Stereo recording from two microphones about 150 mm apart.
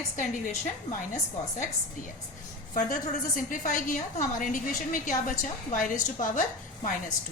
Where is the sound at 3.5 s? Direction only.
60° left (ahead or behind).